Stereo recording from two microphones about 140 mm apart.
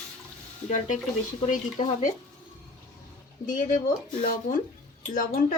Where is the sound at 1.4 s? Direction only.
60° left (ahead or behind).